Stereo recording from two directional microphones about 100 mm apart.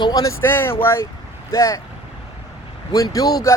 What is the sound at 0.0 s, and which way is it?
Speech, 40° left (ahead or behind).